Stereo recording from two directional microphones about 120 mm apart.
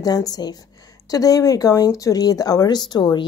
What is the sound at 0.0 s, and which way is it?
A woman's voice, 30° left (ahead or behind).